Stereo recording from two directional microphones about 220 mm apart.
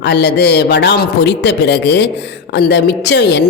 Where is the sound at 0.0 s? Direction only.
50° left (ahead or behind).